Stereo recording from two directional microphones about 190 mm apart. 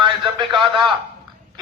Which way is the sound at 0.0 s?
25° right (ahead or behind).